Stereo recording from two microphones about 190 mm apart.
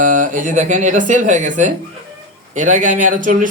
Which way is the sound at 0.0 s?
45° right (ahead or behind).